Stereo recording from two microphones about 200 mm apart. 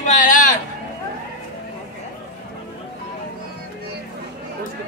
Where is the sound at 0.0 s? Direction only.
40° left (ahead or behind).